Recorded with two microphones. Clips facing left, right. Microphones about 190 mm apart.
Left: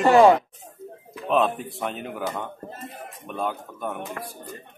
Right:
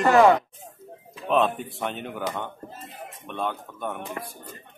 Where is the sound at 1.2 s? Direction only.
Centre (ahead or behind).